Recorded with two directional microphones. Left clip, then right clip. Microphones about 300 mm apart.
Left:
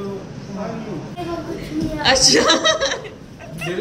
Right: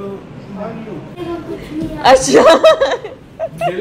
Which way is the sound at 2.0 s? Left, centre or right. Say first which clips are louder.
Right 7 dB; centre.